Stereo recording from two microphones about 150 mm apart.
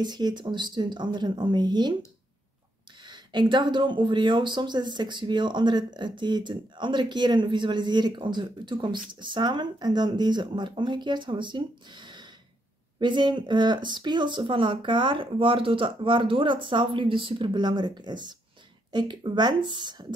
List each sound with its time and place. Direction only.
0.0 s speech: 30° right (ahead or behind)
3.1 s speech: 30° right (ahead or behind)